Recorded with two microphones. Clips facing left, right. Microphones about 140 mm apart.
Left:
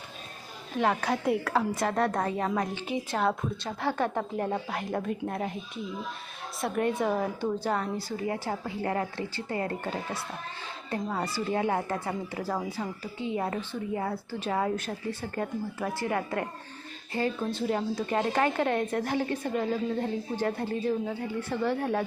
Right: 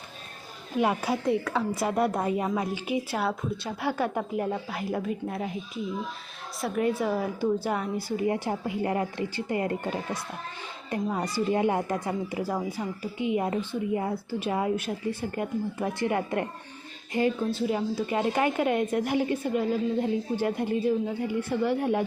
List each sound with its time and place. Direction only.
0.8 s speech: 10° right (ahead or behind)
1.2 s a woman's voice: centre (ahead or behind); by 17.3 s 15° right (ahead or behind)
17.5 s speech: 5° right (ahead or behind)